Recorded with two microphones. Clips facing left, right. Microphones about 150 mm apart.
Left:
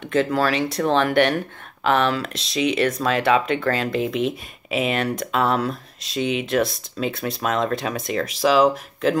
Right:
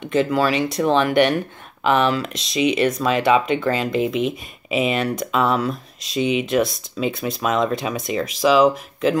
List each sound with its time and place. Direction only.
0.0 s speech: 5° right (ahead or behind)